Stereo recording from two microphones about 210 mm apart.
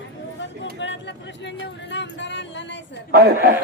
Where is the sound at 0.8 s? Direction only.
60° left (ahead or behind).